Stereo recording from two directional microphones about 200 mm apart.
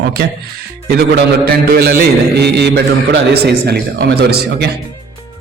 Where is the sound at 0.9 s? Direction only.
50° right (ahead or behind).